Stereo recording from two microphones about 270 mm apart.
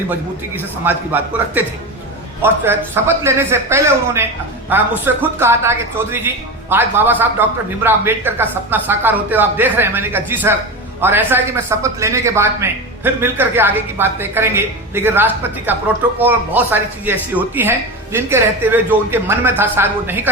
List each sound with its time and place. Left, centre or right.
0.5 s speech: centre